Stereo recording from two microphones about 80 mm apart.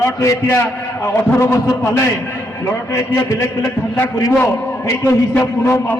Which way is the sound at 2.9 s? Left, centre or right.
Left.